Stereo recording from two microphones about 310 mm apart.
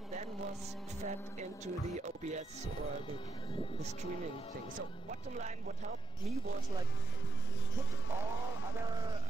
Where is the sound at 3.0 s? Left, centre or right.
Centre.